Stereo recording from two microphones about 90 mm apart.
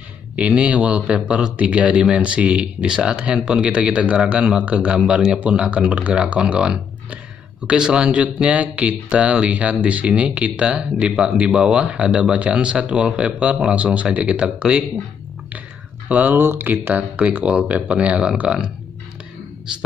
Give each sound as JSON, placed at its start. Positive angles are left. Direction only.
{"t": 0.4, "sound": "speech", "side_deg": -15}
{"t": 16.1, "sound": "speech", "side_deg": -20}